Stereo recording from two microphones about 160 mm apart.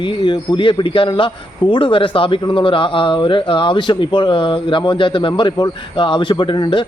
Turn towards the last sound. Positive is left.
turn(degrees=30)  # may be behind; listen again after turning